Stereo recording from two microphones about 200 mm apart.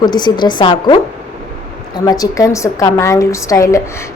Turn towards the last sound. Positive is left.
turn(degrees=15)  # may be behind; listen again after turning